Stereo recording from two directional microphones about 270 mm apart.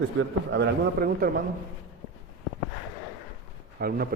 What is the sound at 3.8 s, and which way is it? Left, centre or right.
Speech, right.